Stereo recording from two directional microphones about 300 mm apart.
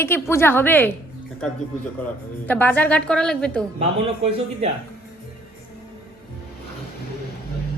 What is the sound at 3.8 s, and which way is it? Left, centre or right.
Speech, right.